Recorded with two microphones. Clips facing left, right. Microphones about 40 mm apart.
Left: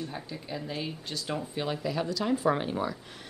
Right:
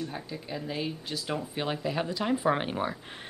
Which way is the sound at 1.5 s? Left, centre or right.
Centre.